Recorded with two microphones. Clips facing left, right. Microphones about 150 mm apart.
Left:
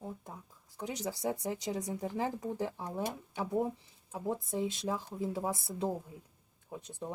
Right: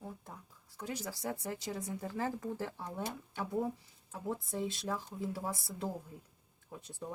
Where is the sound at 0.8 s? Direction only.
20° left (ahead or behind).